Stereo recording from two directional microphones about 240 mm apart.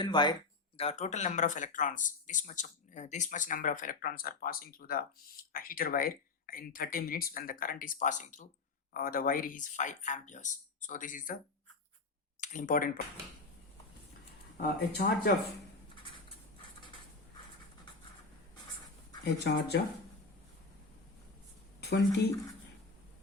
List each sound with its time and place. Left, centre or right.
0.0 s speech: centre; by 11.3 s left
12.4 s speech: left
14.6 s speech: left
19.2 s speech: left
21.8 s a sound: left